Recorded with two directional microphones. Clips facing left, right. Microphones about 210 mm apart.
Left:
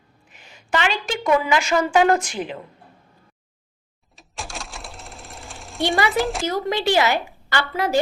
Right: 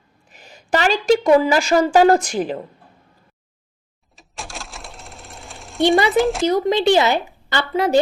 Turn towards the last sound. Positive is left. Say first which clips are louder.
# right 4 dB
turn(degrees=-20)  # may be behind; listen again after turning